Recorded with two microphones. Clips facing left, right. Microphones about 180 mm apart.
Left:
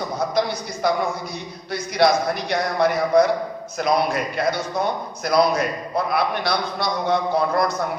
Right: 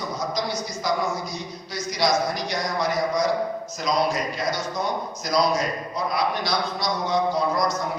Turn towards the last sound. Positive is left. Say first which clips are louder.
# left 2 dB
turn(degrees=60)  # may be behind; listen again after turning